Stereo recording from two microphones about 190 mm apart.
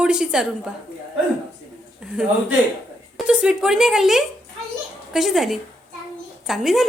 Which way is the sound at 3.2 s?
5° right (ahead or behind).